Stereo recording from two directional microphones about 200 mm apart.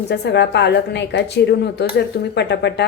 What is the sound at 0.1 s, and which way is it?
A woman's voice, 60° left (ahead or behind).